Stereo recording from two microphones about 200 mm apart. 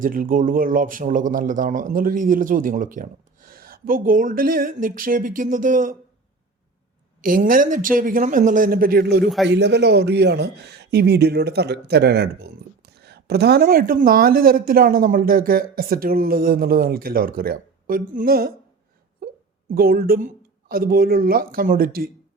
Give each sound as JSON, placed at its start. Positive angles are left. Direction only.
{"t": 0.0, "sound": "a man's voice", "side_deg": -45}
{"t": 7.2, "sound": "a man's voice", "side_deg": -45}
{"t": 19.7, "sound": "a man's voice", "side_deg": -45}